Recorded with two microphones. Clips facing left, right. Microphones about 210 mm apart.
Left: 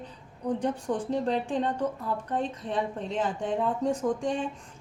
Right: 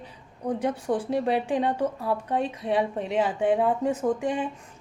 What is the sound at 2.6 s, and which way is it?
Speech, 60° right (ahead or behind).